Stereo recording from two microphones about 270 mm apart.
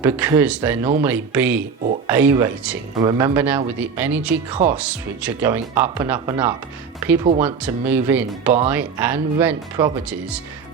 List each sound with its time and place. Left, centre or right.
0.0 s speech: centre
4.5 s speech: right
4.8 s speech: centre